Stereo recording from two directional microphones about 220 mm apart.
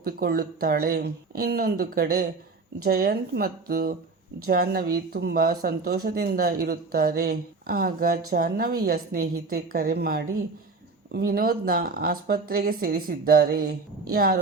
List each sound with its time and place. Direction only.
0.0 s speech: 45° right (ahead or behind)